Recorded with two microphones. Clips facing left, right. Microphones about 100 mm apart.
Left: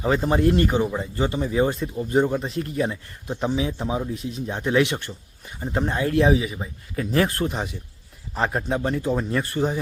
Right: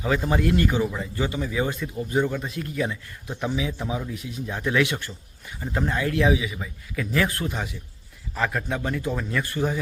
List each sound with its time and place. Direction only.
0.0 s speech: 30° left (ahead or behind)